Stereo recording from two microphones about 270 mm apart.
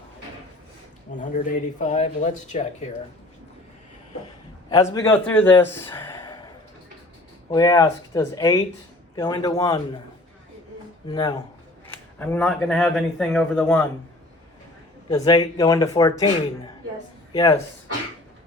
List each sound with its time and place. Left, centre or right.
1.2 s speech: left
4.7 s speech: centre
7.5 s speech: centre
11.1 s speech: centre
15.1 s speech: centre
17.3 s speech: centre